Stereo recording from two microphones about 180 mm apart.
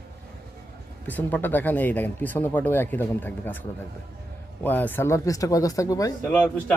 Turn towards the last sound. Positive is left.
turn(degrees=5)  # may be behind; listen again after turning